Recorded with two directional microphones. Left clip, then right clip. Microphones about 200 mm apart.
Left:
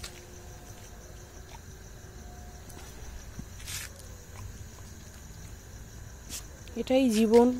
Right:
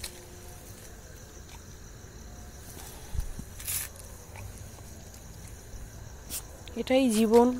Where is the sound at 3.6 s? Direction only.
30° right (ahead or behind).